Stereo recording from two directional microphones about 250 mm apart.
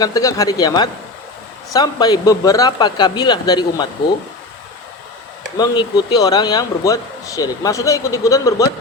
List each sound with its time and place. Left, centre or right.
0.0 s speech: centre
5.5 s speech: centre